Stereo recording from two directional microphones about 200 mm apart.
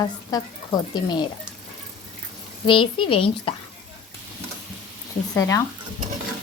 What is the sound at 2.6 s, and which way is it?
Speech, 25° left (ahead or behind).